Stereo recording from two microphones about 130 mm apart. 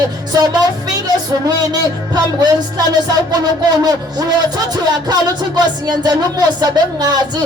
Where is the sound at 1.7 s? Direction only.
30° right (ahead or behind).